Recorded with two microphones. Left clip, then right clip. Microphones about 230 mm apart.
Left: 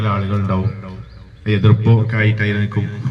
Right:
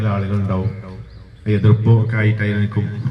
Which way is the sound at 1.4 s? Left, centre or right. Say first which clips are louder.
Left 1 dB; left.